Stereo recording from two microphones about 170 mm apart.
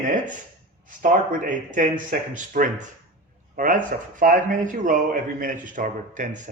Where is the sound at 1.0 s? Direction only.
50° right (ahead or behind).